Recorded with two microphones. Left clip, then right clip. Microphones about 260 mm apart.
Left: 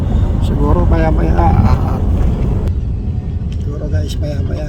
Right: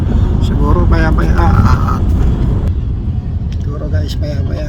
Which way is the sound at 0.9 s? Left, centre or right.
Right.